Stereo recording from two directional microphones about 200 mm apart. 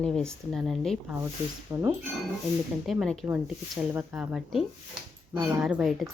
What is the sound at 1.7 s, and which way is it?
Speech, 15° right (ahead or behind).